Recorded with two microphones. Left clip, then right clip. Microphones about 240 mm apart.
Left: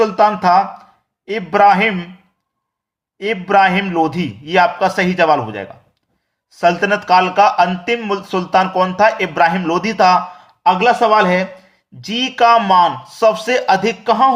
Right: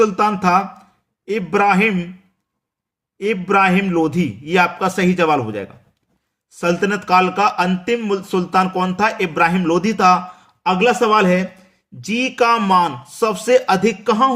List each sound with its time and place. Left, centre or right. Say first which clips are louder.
0.0 s a man's voice: left 3 dB; right
3.2 s a man's voice: left 3 dB; centre